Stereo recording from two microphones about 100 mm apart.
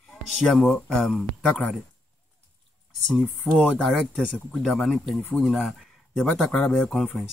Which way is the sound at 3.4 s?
15° left (ahead or behind).